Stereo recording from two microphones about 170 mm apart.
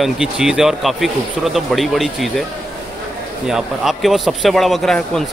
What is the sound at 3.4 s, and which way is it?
Speech, centre (ahead or behind).